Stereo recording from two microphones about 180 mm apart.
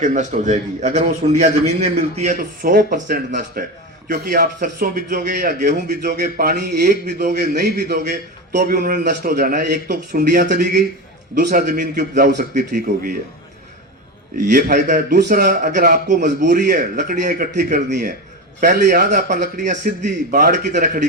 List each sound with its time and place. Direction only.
0.0 s a man's voice: 40° right (ahead or behind)
14.5 s a man's voice: 45° right (ahead or behind)